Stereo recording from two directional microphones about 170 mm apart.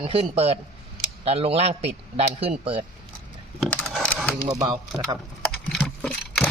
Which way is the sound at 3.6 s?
5° left (ahead or behind).